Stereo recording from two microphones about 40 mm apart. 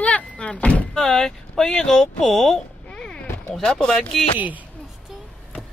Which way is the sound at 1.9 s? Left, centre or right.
Centre.